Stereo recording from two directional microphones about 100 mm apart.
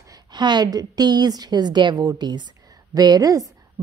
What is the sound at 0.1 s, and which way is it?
A woman's voice, 45° right (ahead or behind).